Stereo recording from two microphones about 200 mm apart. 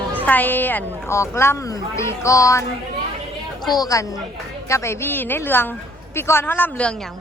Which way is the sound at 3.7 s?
20° left (ahead or behind).